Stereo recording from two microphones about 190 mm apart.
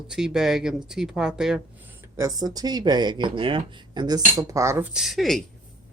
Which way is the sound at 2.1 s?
20° right (ahead or behind).